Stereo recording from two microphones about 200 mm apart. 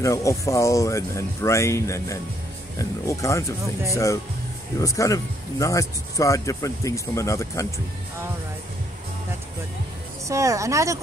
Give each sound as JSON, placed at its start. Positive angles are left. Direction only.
{"t": 0.0, "sound": "speech", "side_deg": 15}
{"t": 10.2, "sound": "speech", "side_deg": -15}